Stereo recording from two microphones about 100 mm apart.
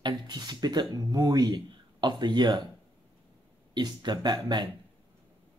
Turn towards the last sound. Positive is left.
turn(degrees=-50)  # may be behind; listen again after turning